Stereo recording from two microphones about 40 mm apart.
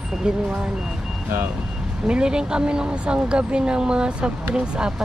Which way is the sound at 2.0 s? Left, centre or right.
Right.